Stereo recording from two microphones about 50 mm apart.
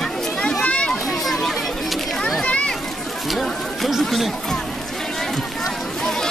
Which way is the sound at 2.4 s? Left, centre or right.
Left.